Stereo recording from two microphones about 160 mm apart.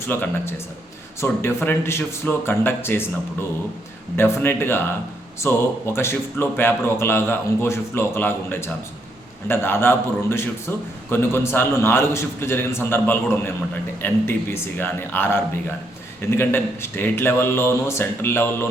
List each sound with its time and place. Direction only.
0.0 s a man's voice: 15° left (ahead or behind)
4.2 s a man's voice: 15° left (ahead or behind)